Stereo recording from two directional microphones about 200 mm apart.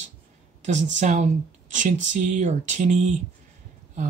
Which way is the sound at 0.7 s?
35° right (ahead or behind).